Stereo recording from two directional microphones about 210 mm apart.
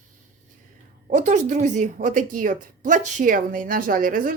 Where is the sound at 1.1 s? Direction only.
35° right (ahead or behind).